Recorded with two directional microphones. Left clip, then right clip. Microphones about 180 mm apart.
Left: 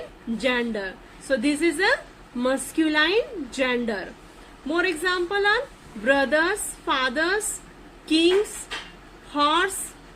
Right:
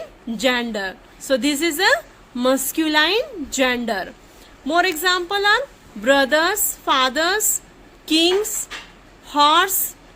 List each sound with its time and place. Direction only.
0.3 s a woman's voice: 65° right (ahead or behind)
9.3 s a woman's voice: 65° right (ahead or behind)